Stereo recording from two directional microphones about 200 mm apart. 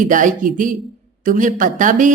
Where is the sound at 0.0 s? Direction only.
40° right (ahead or behind).